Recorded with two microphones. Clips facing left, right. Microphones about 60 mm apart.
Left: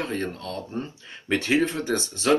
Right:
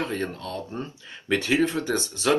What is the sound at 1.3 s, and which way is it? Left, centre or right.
Speech, left.